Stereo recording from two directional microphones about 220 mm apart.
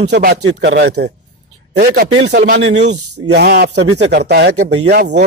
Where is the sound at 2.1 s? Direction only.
55° right (ahead or behind).